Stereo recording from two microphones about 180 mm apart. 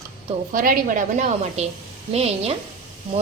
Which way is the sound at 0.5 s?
50° right (ahead or behind).